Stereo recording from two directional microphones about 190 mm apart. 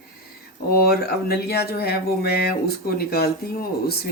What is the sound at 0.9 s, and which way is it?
Speech, 55° left (ahead or behind).